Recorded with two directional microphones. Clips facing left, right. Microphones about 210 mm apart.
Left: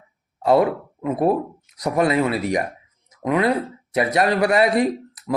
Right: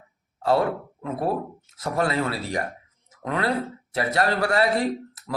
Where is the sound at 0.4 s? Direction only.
15° left (ahead or behind).